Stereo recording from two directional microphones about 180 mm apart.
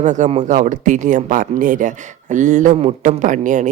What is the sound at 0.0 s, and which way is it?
Speech, 40° right (ahead or behind).